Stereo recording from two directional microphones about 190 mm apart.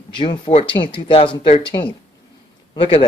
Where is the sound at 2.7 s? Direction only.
25° left (ahead or behind).